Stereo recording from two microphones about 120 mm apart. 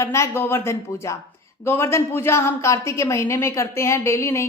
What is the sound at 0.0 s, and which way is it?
A woman's voice, 25° left (ahead or behind).